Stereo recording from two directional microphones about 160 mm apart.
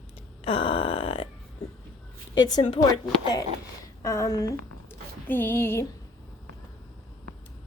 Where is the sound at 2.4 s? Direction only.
25° left (ahead or behind).